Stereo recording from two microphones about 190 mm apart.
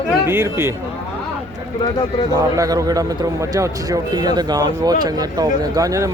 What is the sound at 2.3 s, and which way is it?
Speech, 20° right (ahead or behind).